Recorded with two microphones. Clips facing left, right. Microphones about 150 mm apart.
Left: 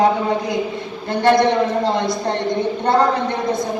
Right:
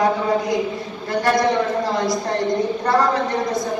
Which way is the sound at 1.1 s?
25° left (ahead or behind).